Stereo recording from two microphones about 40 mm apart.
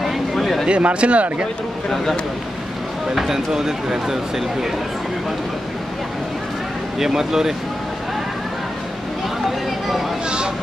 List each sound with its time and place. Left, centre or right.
0.0 s a sound: centre
0.7 s speech: right
3.2 s speech: centre
7.0 s speech: centre